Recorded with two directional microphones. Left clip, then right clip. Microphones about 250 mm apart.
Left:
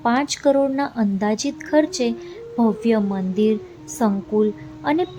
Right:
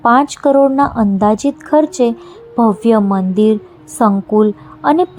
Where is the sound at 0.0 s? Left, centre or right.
Centre.